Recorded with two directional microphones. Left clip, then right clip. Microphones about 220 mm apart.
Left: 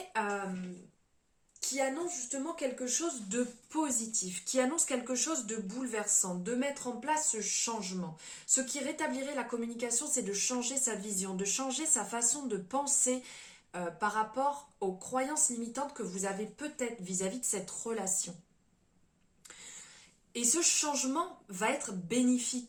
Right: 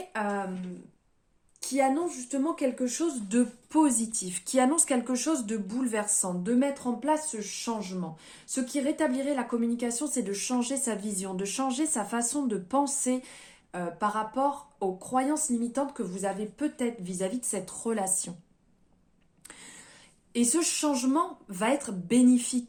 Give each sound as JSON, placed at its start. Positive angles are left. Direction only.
{"t": 1.7, "sound": "speech", "side_deg": -45}
{"t": 19.5, "sound": "a sound", "side_deg": -45}
{"t": 20.3, "sound": "speech", "side_deg": -40}